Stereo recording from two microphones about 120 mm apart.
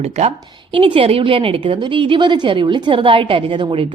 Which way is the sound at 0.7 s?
45° right (ahead or behind).